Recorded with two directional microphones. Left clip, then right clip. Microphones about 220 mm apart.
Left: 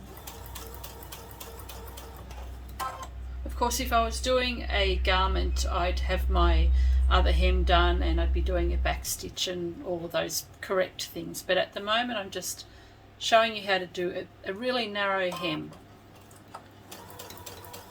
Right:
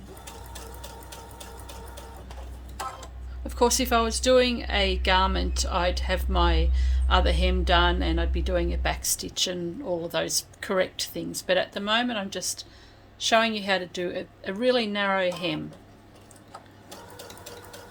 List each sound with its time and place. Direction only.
3.5 s speech: 50° right (ahead or behind)